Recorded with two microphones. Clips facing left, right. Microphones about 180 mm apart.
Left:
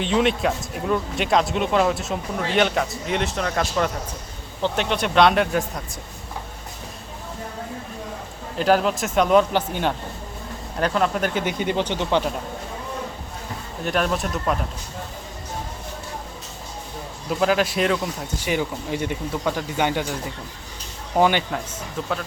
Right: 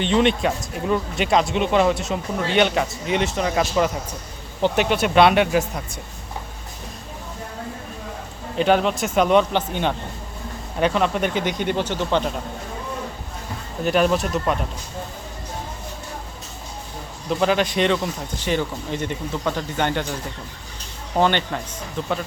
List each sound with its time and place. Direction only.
0.0 s speech: centre (ahead or behind)
8.5 s speech: centre (ahead or behind)
13.8 s speech: centre (ahead or behind)
17.2 s speech: 5° left (ahead or behind)
21.2 s speech: 10° left (ahead or behind)